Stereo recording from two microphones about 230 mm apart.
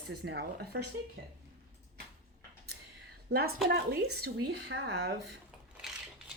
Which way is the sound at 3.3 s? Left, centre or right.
Right.